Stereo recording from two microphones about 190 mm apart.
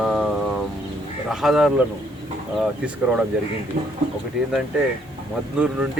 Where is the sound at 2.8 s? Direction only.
5° right (ahead or behind).